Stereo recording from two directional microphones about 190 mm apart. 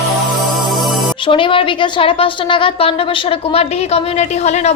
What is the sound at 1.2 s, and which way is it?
A woman's voice, 25° left (ahead or behind).